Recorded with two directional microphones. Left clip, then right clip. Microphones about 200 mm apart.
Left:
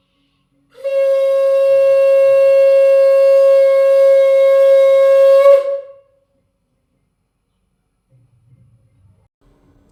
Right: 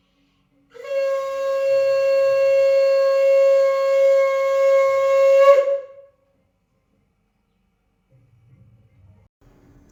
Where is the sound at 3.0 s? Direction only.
40° right (ahead or behind).